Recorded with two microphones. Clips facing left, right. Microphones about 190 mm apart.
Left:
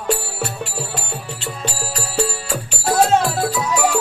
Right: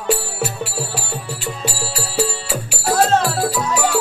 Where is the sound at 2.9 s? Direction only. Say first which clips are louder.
Left 1 dB; 10° left (ahead or behind).